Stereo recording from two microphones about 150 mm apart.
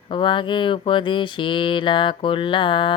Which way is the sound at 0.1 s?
35° left (ahead or behind).